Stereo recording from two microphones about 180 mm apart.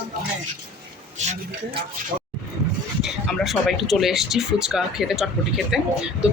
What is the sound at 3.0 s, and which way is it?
Speech, centre (ahead or behind).